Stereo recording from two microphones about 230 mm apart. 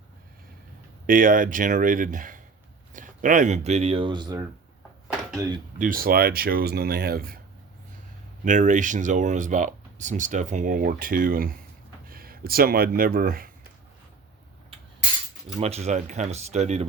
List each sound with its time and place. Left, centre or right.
1.0 s speech: right; by 4.4 s centre
5.0 s a sound: centre
5.8 s speech: right
8.4 s speech: right
15.6 s speech: right